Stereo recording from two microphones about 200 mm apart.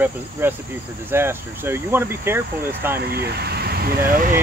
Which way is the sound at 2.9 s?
50° right (ahead or behind).